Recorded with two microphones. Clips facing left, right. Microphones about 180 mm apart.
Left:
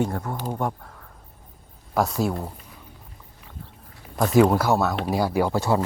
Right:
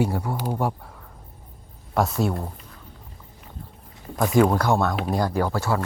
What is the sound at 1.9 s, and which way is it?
Speech, centre (ahead or behind).